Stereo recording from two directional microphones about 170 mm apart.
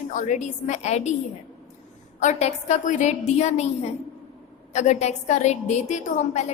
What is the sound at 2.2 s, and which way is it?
A woman's voice, 40° left (ahead or behind).